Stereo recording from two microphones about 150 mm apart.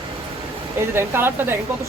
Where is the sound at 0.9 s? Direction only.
15° right (ahead or behind).